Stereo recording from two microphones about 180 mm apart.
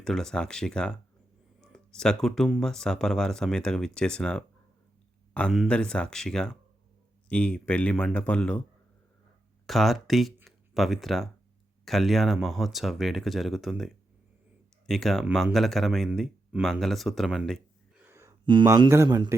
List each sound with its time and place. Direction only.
0.0 s speech: 5° left (ahead or behind)
9.6 s speech: centre (ahead or behind)
18.0 s a sound: 15° right (ahead or behind)
18.4 s a man's voice: 20° right (ahead or behind)